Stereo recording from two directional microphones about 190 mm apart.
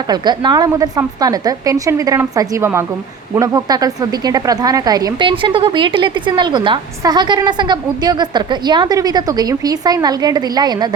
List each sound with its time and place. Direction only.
0.1 s a woman's voice: 20° right (ahead or behind)